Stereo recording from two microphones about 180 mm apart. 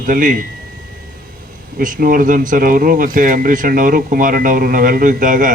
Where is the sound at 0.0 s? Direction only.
50° right (ahead or behind).